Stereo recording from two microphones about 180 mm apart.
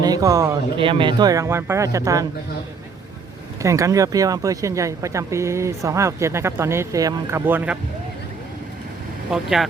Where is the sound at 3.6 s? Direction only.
15° right (ahead or behind).